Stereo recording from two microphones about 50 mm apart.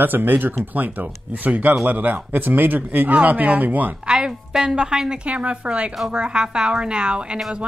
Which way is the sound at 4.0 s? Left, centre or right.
Centre.